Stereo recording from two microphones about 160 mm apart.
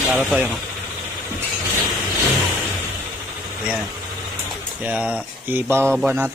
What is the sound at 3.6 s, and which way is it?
Speech, centre (ahead or behind).